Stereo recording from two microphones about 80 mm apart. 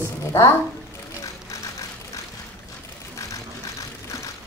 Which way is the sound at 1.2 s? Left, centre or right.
Left.